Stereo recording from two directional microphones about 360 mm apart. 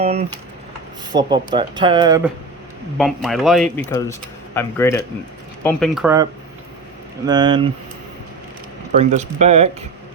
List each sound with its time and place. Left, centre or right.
0.0 s a man's voice: centre
7.3 s speech: centre
9.0 s speech: centre